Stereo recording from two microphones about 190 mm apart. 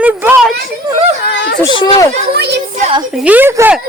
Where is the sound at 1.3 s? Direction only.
60° left (ahead or behind).